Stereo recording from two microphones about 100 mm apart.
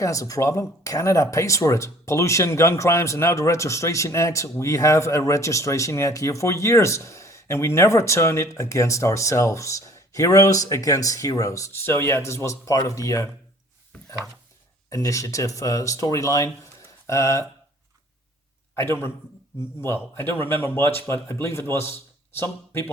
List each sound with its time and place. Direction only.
0.0 s speech: 35° left (ahead or behind)
14.8 s speech: 30° left (ahead or behind)
18.8 s speech: 25° left (ahead or behind)